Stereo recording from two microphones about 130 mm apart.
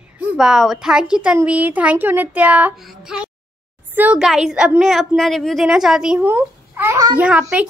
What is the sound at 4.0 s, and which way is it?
A child's voice, 10° right (ahead or behind).